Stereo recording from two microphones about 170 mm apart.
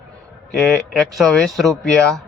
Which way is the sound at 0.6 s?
Centre (ahead or behind).